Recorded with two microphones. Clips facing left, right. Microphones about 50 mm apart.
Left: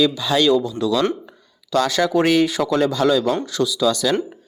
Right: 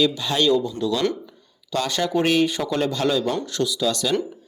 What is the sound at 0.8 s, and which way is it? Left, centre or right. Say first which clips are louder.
Speech: left 3 dB; left.